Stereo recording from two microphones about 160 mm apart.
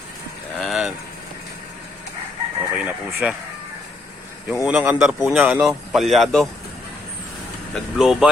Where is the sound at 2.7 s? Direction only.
10° right (ahead or behind).